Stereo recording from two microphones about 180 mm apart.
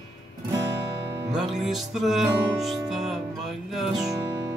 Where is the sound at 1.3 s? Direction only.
5° right (ahead or behind).